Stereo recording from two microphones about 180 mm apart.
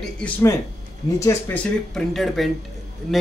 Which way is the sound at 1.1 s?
15° left (ahead or behind).